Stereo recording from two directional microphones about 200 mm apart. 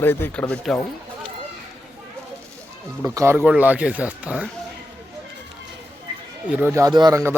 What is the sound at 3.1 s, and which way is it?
Speech, 15° right (ahead or behind).